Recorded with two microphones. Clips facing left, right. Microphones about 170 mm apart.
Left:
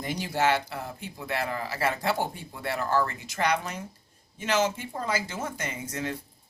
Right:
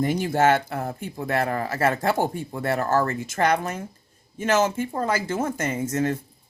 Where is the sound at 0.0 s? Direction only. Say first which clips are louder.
Right 6 dB; 50° right (ahead or behind).